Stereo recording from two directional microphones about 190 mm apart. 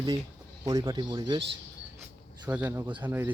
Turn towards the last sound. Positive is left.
turn(degrees=-10)  # may be behind; listen again after turning